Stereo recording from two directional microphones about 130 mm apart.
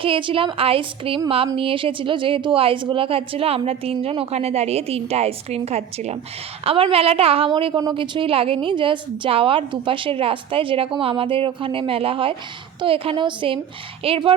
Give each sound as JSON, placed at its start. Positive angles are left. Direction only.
{"t": 0.0, "sound": "a woman's voice", "side_deg": -40}